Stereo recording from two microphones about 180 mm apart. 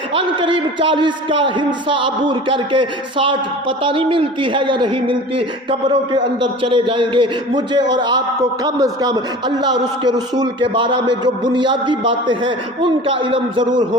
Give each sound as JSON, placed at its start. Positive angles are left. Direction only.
{"t": 0.1, "sound": "a man's voice", "side_deg": -30}